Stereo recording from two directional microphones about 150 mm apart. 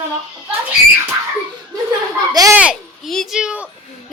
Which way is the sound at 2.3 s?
25° right (ahead or behind).